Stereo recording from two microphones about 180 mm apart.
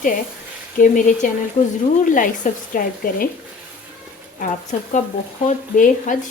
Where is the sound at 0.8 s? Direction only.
45° left (ahead or behind).